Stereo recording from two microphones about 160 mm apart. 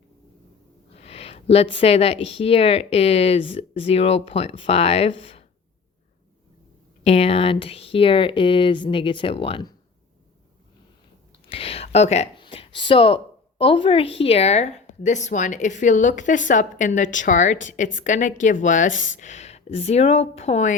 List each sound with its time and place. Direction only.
0.9 s speech: 40° left (ahead or behind)
7.0 s speech: 40° left (ahead or behind)
11.4 s speech: 35° left (ahead or behind)
12.4 s a woman's voice: 30° left (ahead or behind)